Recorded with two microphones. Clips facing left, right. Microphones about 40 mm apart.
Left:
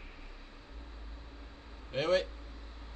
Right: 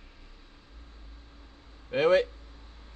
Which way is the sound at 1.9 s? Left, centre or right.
Right.